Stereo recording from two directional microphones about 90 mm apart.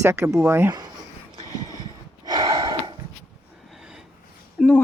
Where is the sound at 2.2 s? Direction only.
50° right (ahead or behind).